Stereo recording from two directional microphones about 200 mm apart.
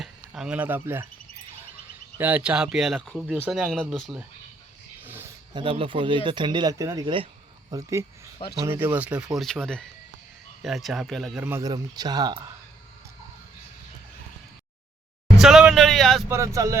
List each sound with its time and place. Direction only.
0.0 s speech: 5° right (ahead or behind)
2.1 s speech: 10° right (ahead or behind)
5.0 s a sound: 10° right (ahead or behind)
5.5 s speech: 25° right (ahead or behind); by 11.4 s centre (ahead or behind)
11.4 s speech: 15° right (ahead or behind)
15.4 s a sound: 5° right (ahead or behind)
16.3 s speech: 15° right (ahead or behind)